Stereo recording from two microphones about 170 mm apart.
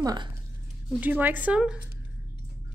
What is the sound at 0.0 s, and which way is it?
Speech, 25° right (ahead or behind).